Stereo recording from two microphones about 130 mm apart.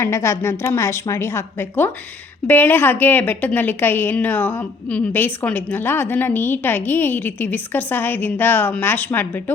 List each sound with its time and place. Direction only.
0.0 s a woman's voice: 20° left (ahead or behind)